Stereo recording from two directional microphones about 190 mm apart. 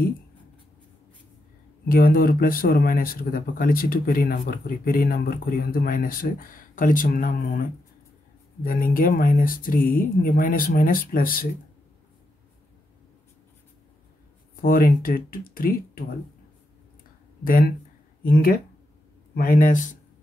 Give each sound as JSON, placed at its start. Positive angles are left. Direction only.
{"t": 1.9, "sound": "speech", "side_deg": 50}
{"t": 8.6, "sound": "speech", "side_deg": 45}
{"t": 14.6, "sound": "speech", "side_deg": 50}
{"t": 17.5, "sound": "speech", "side_deg": 50}